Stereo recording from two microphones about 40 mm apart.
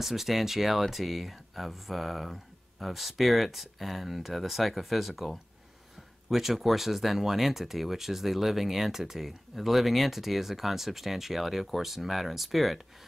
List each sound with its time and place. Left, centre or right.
0.0 s speech: centre